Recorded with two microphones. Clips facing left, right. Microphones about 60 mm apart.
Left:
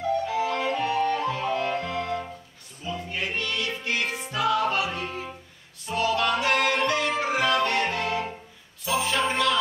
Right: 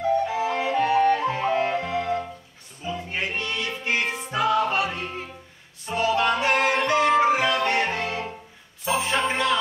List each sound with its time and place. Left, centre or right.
0.2 s music: right
5.9 s music: right